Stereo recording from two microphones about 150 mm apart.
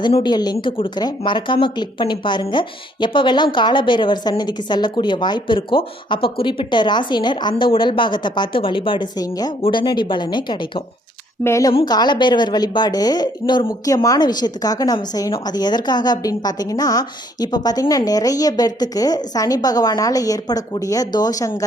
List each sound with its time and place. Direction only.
0.0 s speech: 30° left (ahead or behind)
11.4 s a woman's voice: 20° left (ahead or behind)